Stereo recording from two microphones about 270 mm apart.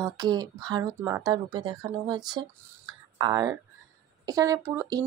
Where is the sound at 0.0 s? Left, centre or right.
Centre.